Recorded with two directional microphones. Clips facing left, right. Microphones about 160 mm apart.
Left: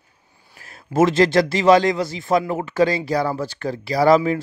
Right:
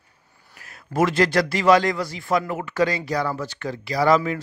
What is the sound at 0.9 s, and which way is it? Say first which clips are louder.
Speech: left 4 dB; 25° left (ahead or behind).